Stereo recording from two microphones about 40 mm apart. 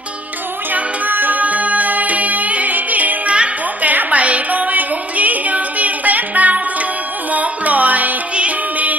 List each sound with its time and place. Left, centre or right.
0.7 s music: right
3.8 s a sound: right
7.3 s music: right